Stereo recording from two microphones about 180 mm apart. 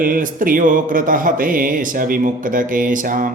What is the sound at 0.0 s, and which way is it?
Music, 50° right (ahead or behind).